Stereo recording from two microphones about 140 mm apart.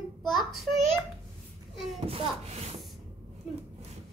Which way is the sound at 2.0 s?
45° right (ahead or behind).